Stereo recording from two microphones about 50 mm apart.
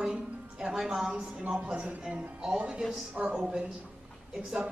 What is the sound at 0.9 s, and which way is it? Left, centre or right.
Speech, centre.